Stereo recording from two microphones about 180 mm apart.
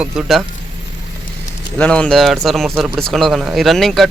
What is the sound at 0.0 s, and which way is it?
Speech, 5° right (ahead or behind).